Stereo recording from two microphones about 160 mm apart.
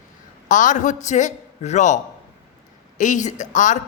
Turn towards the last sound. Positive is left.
turn(degrees=50)  # may be behind; listen again after turning